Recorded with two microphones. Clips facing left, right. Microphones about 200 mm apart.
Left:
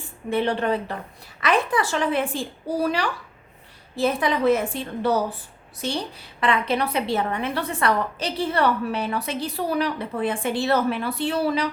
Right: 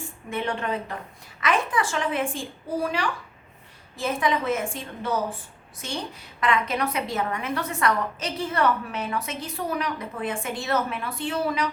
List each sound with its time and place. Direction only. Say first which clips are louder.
0.3 s a woman's voice: left 6 dB; 35° left (ahead or behind)
3.9 s a woman's voice: left 3 dB; 35° left (ahead or behind)